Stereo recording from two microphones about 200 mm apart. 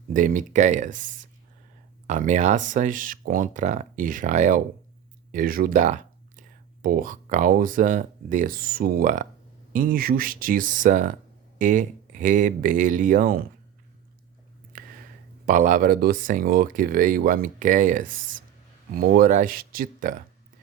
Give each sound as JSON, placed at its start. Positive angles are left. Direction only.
{"t": 0.1, "sound": "speech", "side_deg": -40}
{"t": 14.7, "sound": "a sound", "side_deg": -45}
{"t": 15.4, "sound": "speech", "side_deg": -40}